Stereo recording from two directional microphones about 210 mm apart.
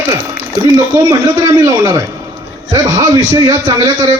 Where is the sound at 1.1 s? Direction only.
15° right (ahead or behind).